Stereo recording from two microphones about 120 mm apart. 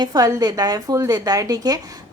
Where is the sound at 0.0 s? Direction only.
30° right (ahead or behind).